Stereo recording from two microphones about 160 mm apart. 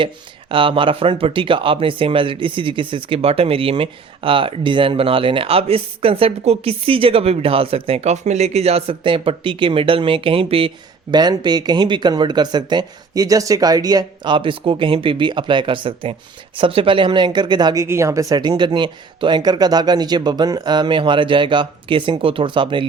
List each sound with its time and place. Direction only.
0.0 s speech: 30° right (ahead or behind)